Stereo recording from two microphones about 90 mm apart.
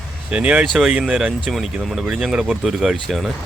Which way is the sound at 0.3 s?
10° right (ahead or behind).